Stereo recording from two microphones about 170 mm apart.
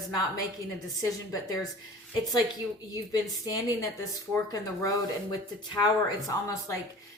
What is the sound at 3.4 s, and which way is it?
Speech, 20° left (ahead or behind).